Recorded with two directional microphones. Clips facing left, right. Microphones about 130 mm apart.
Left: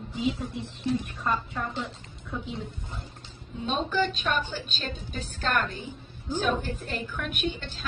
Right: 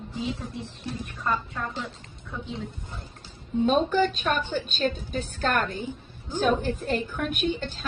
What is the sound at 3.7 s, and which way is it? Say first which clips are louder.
A woman's voice: right 4 dB; 45° right (ahead or behind).